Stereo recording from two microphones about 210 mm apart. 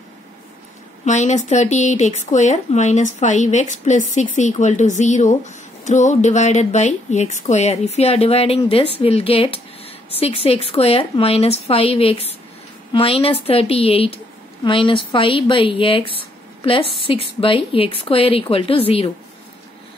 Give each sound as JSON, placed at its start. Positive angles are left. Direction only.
{"t": 1.0, "sound": "speech", "side_deg": 35}